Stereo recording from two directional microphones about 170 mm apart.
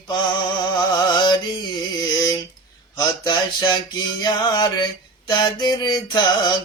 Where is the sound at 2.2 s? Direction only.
20° left (ahead or behind).